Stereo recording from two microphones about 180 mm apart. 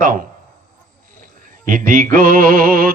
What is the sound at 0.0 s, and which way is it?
Mantra, 50° right (ahead or behind).